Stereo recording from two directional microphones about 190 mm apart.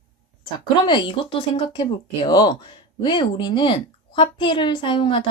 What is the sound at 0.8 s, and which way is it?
Speech, 25° left (ahead or behind).